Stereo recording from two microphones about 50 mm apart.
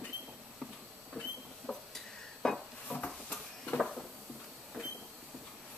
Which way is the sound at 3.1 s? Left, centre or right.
Centre.